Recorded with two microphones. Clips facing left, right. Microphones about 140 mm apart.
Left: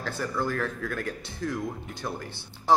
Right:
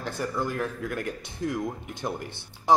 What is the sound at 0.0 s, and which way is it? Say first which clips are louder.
Speech: even; 15° right (ahead or behind).